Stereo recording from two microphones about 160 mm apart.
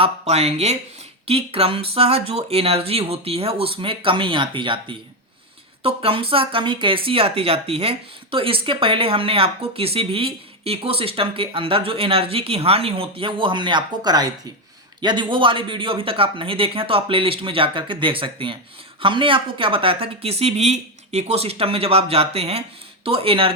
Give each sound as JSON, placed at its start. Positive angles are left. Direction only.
{"t": 0.0, "sound": "speech", "side_deg": -40}